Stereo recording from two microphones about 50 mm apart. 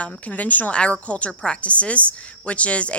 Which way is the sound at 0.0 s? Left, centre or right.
Left.